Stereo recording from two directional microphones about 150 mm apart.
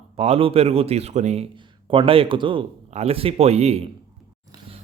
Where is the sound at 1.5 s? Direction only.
35° right (ahead or behind).